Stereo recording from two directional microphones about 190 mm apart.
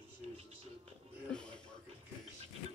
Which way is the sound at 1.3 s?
5° left (ahead or behind).